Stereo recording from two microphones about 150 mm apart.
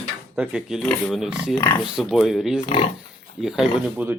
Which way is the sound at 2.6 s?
40° left (ahead or behind).